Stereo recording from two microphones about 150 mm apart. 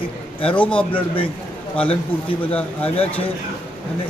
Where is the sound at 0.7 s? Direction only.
35° left (ahead or behind).